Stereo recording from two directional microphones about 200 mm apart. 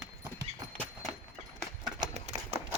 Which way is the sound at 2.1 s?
35° right (ahead or behind).